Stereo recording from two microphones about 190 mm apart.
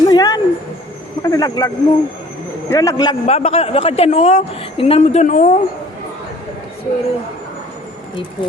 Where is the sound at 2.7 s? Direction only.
20° left (ahead or behind).